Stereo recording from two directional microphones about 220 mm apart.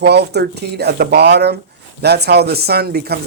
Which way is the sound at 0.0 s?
50° right (ahead or behind).